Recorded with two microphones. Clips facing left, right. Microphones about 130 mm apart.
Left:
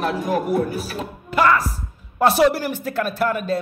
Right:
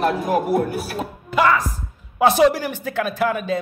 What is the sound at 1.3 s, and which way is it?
Speech, centre (ahead or behind).